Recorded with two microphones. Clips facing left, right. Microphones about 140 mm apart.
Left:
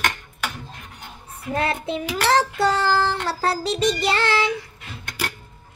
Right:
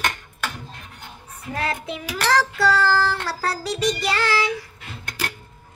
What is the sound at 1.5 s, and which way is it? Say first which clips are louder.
Child singing: left 3 dB; 25° left (ahead or behind).